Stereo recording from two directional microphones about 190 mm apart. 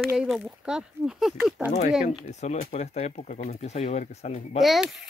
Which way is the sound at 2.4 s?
35° left (ahead or behind).